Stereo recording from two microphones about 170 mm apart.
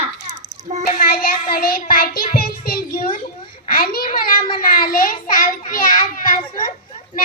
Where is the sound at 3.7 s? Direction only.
60° left (ahead or behind).